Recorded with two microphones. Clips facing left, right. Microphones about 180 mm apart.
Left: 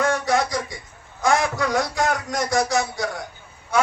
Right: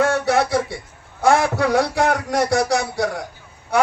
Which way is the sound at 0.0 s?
65° right (ahead or behind).